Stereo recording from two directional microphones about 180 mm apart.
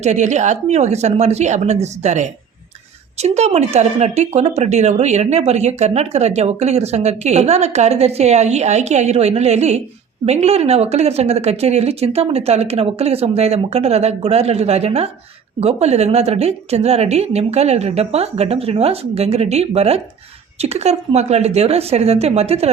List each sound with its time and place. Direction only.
0.0 s speech: 40° right (ahead or behind)